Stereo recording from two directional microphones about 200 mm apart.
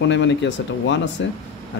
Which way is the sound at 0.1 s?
65° left (ahead or behind).